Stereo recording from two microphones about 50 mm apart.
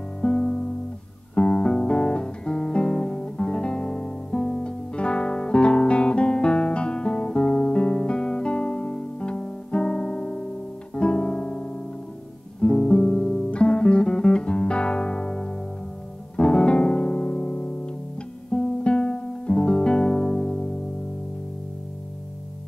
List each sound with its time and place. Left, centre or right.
0.2 s music: centre
1.3 s guitar: centre
16.3 s music: centre